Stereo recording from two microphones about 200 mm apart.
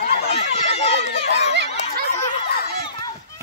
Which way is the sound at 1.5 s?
60° right (ahead or behind).